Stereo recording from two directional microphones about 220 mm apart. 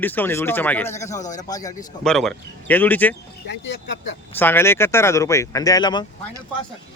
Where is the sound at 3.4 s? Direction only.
55° left (ahead or behind).